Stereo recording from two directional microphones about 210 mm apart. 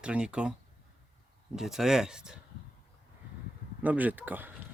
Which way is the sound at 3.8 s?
10° right (ahead or behind).